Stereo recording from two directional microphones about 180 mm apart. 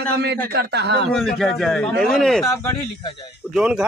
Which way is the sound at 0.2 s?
65° right (ahead or behind).